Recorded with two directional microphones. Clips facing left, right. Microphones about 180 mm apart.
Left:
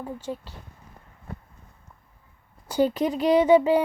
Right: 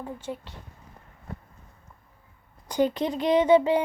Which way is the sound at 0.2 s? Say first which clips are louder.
Left 2 dB; 35° left (ahead or behind).